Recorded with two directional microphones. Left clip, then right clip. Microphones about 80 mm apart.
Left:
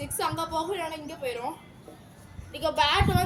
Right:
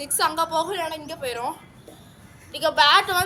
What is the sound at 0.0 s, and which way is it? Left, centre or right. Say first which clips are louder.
A woman's voice: right 7 dB; centre.